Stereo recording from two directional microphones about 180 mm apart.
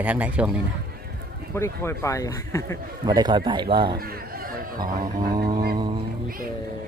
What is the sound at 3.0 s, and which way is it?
Speech, 20° right (ahead or behind).